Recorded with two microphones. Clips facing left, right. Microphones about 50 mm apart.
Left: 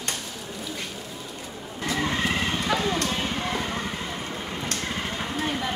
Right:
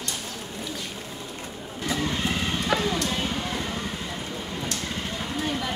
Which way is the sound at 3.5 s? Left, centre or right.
Left.